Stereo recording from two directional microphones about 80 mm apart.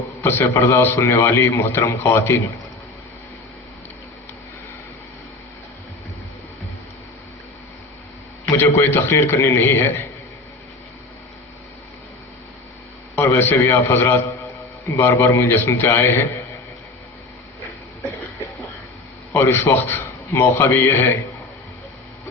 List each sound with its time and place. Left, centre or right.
0.2 s a man's voice: left
8.5 s a man's voice: left
13.1 s a man's voice: left
19.3 s a man's voice: left